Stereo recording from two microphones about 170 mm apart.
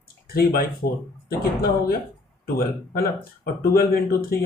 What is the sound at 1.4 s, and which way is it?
Speech, 60° left (ahead or behind).